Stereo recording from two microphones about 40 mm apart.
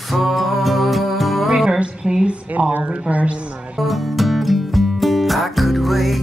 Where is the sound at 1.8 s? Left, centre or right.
Centre.